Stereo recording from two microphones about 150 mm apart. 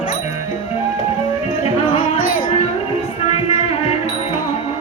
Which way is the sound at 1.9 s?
35° left (ahead or behind).